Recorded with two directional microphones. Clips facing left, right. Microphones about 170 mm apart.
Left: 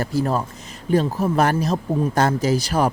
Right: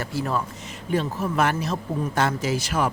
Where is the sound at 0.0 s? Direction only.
40° left (ahead or behind).